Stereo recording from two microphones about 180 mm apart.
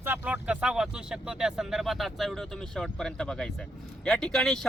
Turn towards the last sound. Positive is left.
turn(degrees=5)  # may be behind; listen again after turning